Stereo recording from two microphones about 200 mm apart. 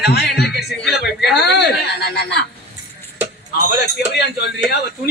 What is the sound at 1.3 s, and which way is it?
Speech, 55° left (ahead or behind).